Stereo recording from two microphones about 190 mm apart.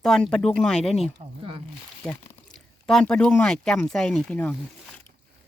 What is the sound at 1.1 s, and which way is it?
Speech, 25° right (ahead or behind).